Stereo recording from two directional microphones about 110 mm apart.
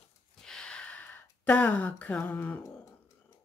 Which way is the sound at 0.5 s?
10° left (ahead or behind).